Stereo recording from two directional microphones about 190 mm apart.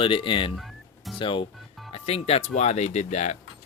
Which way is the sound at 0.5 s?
Centre (ahead or behind).